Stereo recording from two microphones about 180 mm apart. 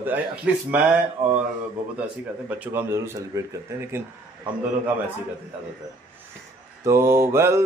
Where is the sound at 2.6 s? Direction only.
10° right (ahead or behind).